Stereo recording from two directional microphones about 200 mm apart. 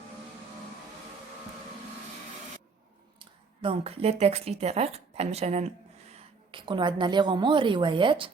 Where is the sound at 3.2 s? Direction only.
25° right (ahead or behind).